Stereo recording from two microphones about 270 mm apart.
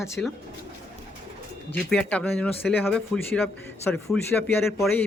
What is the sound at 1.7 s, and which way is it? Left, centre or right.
Speech, centre.